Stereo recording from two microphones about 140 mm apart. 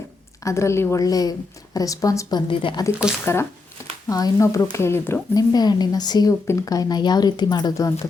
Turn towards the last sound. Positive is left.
turn(degrees=25)  # may be behind; listen again after turning